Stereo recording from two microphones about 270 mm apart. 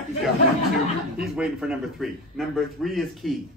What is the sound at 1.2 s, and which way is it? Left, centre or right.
A man's voice, centre.